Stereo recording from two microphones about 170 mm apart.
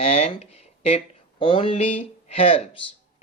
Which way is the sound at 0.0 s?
40° left (ahead or behind).